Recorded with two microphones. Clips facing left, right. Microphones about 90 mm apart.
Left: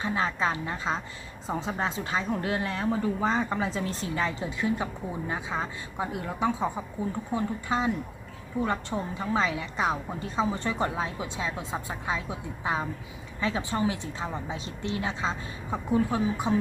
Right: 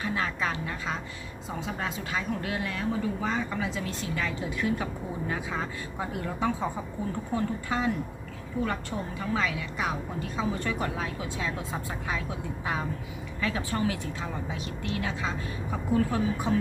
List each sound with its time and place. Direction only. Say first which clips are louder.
0.0 s a woman's voice: left 2 dB; 25° left (ahead or behind)